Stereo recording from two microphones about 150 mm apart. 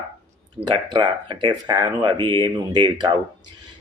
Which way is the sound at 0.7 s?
30° right (ahead or behind).